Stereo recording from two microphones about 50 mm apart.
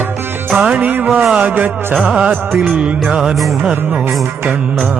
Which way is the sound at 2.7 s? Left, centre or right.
Right.